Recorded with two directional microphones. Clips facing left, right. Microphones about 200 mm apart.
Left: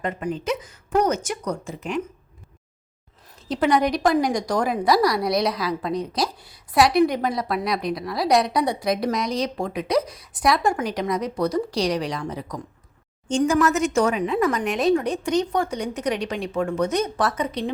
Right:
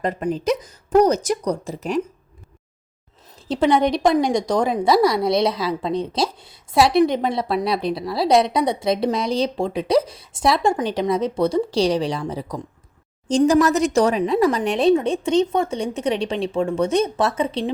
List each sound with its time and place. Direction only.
0.0 s speech: 35° right (ahead or behind)
3.5 s a woman's voice: 25° right (ahead or behind)